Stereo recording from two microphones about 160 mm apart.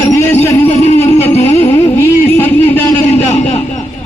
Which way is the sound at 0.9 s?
15° left (ahead or behind).